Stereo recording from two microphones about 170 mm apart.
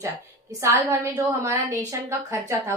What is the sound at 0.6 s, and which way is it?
A woman's voice, 15° right (ahead or behind).